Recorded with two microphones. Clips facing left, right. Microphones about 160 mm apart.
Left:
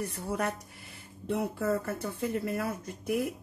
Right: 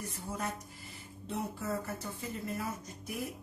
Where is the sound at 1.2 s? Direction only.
60° left (ahead or behind).